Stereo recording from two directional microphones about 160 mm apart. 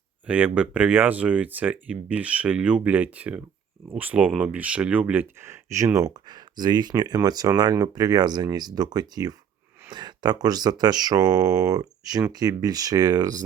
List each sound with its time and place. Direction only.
0.3 s speech: 10° right (ahead or behind)